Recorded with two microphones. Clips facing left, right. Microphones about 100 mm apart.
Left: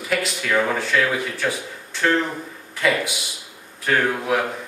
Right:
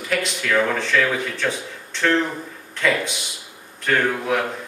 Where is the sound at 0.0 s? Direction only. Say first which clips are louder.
Even; 5° left (ahead or behind).